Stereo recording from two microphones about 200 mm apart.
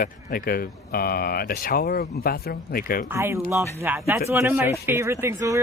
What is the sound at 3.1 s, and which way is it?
Speech, 15° right (ahead or behind).